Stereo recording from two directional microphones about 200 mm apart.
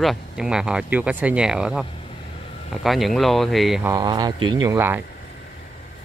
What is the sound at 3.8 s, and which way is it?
Speech, 20° right (ahead or behind).